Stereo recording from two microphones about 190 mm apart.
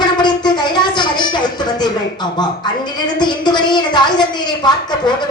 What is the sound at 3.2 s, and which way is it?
Speech, 25° left (ahead or behind).